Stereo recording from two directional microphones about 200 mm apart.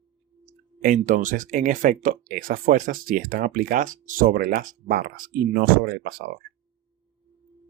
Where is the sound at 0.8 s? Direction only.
40° right (ahead or behind).